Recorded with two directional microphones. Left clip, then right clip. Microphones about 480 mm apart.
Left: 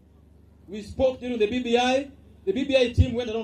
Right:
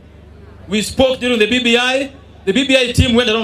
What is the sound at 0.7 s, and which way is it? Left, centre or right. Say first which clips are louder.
A man's voice: right 10 dB; centre.